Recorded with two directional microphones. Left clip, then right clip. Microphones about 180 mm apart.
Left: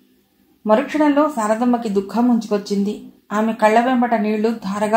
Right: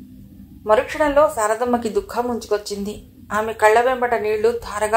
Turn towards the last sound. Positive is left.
turn(degrees=-30)  # may be behind; listen again after turning